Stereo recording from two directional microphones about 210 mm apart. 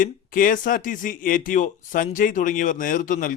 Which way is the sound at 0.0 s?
40° left (ahead or behind).